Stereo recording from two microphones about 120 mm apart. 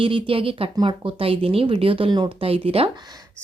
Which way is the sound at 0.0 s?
45° right (ahead or behind).